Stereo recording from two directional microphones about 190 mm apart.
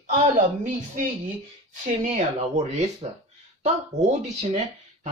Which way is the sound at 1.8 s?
35° right (ahead or behind).